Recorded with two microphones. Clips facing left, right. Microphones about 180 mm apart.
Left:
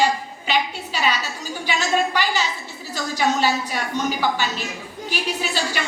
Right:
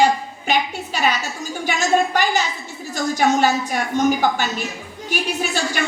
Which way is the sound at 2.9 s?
50° right (ahead or behind).